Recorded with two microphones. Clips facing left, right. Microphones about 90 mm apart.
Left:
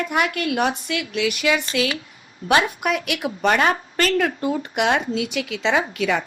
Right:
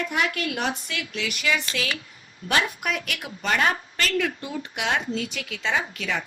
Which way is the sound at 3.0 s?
20° left (ahead or behind).